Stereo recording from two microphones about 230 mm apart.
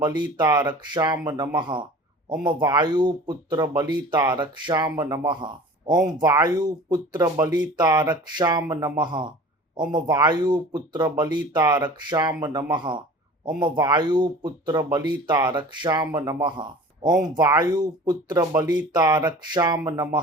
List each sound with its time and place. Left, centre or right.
0.0 s speech: centre